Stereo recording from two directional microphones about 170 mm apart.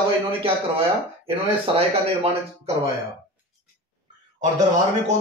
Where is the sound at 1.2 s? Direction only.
35° right (ahead or behind).